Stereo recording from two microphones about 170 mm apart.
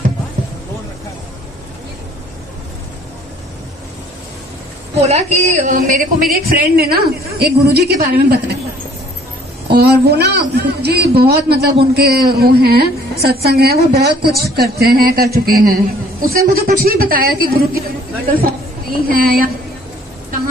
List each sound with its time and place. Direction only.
5.0 s a man's voice: 40° right (ahead or behind); by 8.5 s 75° right (ahead or behind)
9.8 s a woman's voice: 70° right (ahead or behind)
19.0 s a man's voice: 60° right (ahead or behind)